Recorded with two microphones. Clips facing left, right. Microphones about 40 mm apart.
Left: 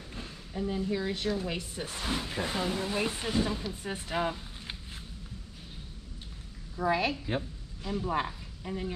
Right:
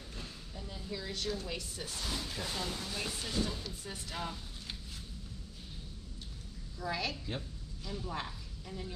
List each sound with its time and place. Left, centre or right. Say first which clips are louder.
0.1 s a woman's voice: left 8 dB; left
6.8 s a woman's voice: left 9 dB; left